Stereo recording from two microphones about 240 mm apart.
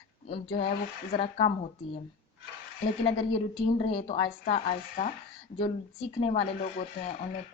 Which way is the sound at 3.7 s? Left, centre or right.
Left.